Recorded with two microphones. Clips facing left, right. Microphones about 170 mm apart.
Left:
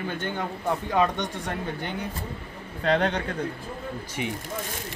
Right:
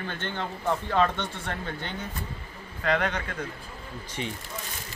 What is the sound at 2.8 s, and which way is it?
Speech, 30° left (ahead or behind).